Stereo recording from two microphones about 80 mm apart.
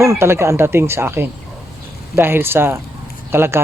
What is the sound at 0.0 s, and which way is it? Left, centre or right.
Speech, right.